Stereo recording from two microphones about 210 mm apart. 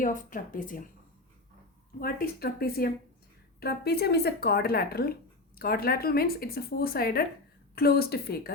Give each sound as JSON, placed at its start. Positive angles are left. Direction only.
{"t": 0.0, "sound": "speech", "side_deg": 40}
{"t": 2.0, "sound": "speech", "side_deg": 45}